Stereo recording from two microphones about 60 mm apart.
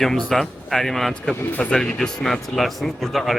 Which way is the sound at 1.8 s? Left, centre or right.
Centre.